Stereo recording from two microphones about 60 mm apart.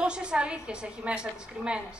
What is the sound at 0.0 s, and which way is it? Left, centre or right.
A woman's voice, centre.